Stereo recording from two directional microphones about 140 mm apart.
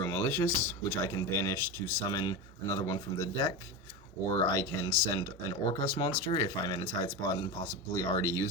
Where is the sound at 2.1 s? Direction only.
25° left (ahead or behind).